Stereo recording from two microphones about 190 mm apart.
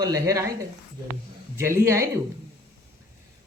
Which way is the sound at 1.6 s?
15° right (ahead or behind).